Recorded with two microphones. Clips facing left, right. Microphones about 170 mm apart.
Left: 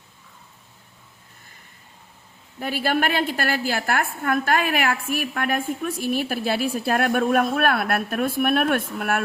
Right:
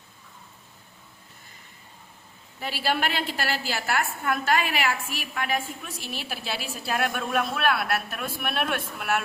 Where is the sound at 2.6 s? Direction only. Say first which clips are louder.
Left 4 dB; 50° left (ahead or behind).